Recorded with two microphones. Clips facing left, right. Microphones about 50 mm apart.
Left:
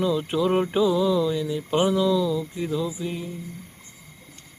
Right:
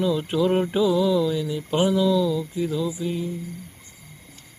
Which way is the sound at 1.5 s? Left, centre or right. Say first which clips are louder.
Even; centre.